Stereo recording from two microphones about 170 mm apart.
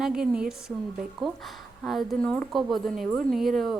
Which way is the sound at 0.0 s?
5° right (ahead or behind).